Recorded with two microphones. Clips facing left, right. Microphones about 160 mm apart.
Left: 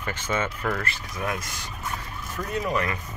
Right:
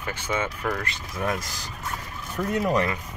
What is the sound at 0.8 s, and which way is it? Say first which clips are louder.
Speech: right 2 dB; 25° right (ahead or behind).